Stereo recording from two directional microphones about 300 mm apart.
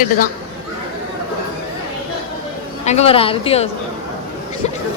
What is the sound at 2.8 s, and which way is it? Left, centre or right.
Speech, left.